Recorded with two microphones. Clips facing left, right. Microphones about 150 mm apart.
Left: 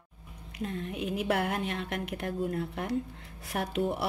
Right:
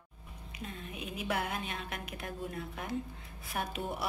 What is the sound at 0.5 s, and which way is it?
A woman's voice, 70° left (ahead or behind).